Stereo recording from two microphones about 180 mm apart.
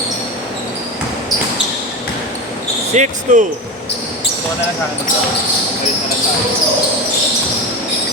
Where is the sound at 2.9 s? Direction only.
40° right (ahead or behind).